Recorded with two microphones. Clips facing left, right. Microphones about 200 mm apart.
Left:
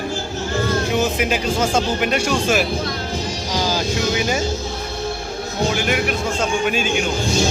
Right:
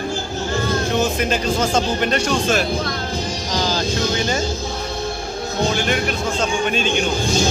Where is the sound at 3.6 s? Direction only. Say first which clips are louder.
Even; 10° left (ahead or behind).